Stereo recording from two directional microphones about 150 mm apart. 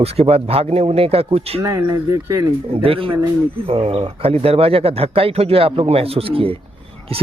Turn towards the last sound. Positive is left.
turn(degrees=-40)  # may be behind; listen again after turning